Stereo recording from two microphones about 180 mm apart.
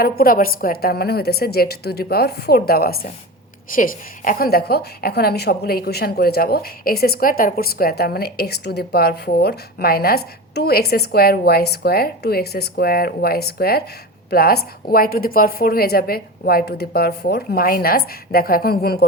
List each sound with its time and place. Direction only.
0.0 s a woman's voice: 55° left (ahead or behind)